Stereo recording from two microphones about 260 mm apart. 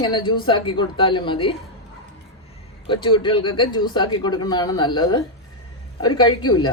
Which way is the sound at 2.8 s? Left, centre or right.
Centre.